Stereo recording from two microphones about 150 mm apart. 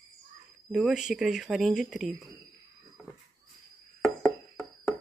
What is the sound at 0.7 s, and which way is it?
Speech, 5° right (ahead or behind).